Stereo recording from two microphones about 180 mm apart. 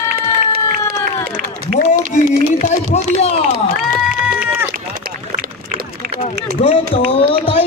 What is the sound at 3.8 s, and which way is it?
Run, 5° right (ahead or behind).